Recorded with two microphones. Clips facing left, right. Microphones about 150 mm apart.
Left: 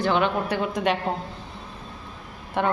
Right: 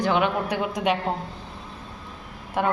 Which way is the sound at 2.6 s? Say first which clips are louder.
Even; 5° right (ahead or behind).